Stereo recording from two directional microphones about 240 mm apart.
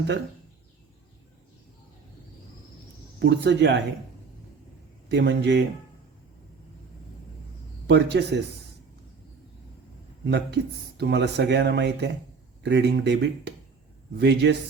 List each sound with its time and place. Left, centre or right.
3.2 s speech: right
5.0 s speech: right
7.9 s speech: right
10.2 s speech: right